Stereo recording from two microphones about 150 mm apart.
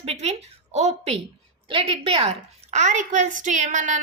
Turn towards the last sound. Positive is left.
turn(degrees=-55)  # may be behind; listen again after turning